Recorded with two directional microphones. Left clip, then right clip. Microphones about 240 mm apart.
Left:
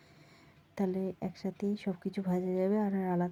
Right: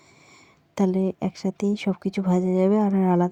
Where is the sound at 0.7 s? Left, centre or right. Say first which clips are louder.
Right 11 dB; right.